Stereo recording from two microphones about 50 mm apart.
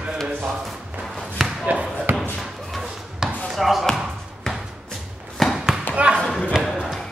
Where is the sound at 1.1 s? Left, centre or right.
Centre.